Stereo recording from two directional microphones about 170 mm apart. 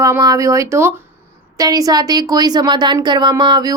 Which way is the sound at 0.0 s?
20° right (ahead or behind).